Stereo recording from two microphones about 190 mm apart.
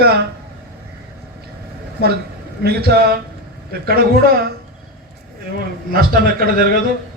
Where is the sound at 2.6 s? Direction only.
55° right (ahead or behind).